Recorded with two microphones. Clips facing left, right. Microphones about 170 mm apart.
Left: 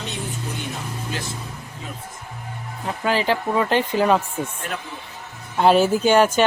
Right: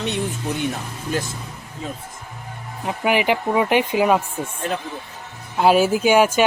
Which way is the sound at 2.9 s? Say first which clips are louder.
Right 2 dB; 15° right (ahead or behind).